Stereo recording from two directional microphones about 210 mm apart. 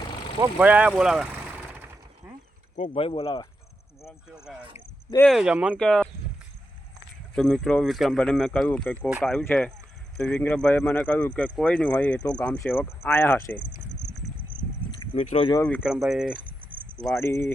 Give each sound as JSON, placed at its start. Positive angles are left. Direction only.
{"t": 0.3, "sound": "vehicle", "side_deg": -10}
{"t": 2.7, "sound": "speech", "side_deg": 30}
{"t": 4.4, "sound": "speech", "side_deg": -5}
{"t": 7.3, "sound": "speech", "side_deg": 0}
{"t": 15.1, "sound": "speech", "side_deg": 35}
{"t": 15.6, "sound": "speech", "side_deg": 0}
{"t": 17.1, "sound": "speech", "side_deg": 10}